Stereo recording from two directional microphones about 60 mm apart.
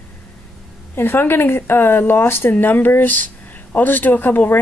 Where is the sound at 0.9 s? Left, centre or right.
Left.